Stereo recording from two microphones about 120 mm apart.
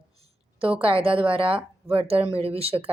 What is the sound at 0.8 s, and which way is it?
Speech, 45° right (ahead or behind).